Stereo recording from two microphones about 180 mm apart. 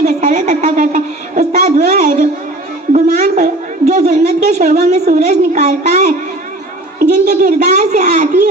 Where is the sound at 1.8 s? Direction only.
60° right (ahead or behind).